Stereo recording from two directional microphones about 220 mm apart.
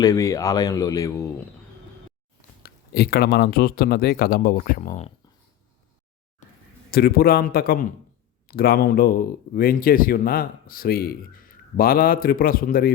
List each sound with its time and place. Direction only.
0.0 s speech: 15° left (ahead or behind)
2.6 s speech: 45° left (ahead or behind)
6.9 s speech: 45° left (ahead or behind)